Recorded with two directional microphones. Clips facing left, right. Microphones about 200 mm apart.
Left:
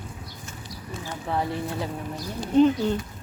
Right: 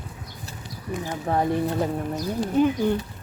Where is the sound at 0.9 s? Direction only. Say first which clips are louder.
Right 6 dB; 15° right (ahead or behind).